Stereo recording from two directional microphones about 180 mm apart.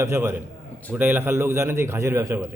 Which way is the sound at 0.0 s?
15° right (ahead or behind).